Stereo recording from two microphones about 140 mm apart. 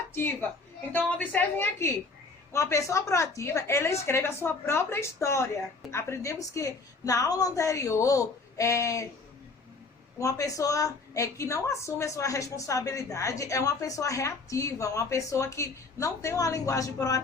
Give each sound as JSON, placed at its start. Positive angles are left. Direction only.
{"t": 0.1, "sound": "a woman's voice", "side_deg": 15}
{"t": 10.2, "sound": "a woman's voice", "side_deg": 25}